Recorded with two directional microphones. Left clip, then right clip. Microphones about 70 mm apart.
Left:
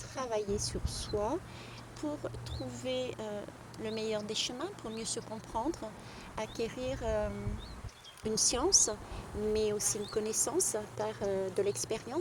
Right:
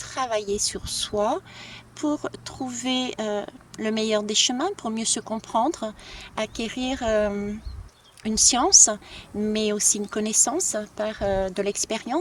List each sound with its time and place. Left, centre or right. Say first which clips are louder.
0.0 s a woman's voice: right 9 dB; right
2.0 s speech: right 12 dB; right
6.3 s a woman's voice: right 8 dB; right